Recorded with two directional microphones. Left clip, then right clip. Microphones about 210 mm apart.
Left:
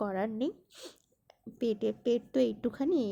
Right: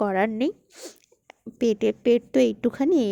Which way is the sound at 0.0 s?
35° right (ahead or behind).